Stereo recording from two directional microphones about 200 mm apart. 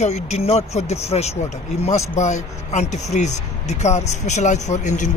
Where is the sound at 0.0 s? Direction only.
35° left (ahead or behind).